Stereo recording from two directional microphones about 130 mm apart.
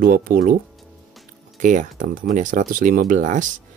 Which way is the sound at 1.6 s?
80° right.